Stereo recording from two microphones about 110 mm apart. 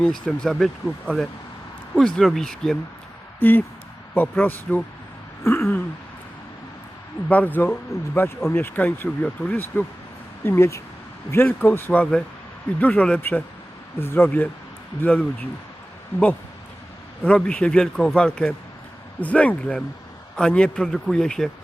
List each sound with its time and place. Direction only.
0.0 s speech: 5° left (ahead or behind)
3.4 s speech: 15° left (ahead or behind)
5.4 s a sound: 20° left (ahead or behind)
7.3 s speech: 15° left (ahead or behind)
16.1 s speech: 25° left (ahead or behind)
17.2 s speech: 10° left (ahead or behind)